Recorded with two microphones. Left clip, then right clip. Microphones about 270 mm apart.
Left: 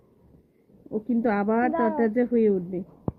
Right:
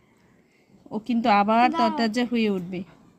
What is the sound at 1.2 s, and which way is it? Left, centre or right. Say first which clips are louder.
Speech: right 6 dB; right.